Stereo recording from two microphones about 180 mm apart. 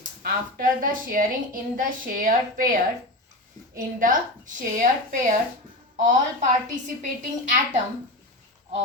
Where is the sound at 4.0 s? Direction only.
45° right (ahead or behind).